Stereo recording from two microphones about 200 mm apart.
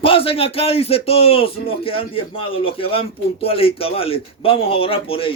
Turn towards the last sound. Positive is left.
turn(degrees=25)  # may be behind; listen again after turning